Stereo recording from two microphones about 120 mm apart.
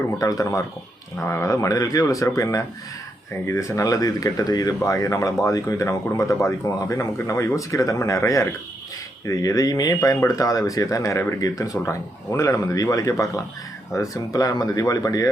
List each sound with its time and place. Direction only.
0.2 s speech: 30° left (ahead or behind)